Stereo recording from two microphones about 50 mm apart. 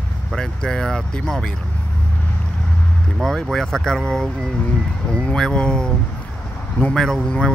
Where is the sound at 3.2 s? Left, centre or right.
Centre.